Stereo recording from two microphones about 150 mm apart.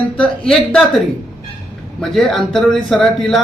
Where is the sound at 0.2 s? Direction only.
5° left (ahead or behind).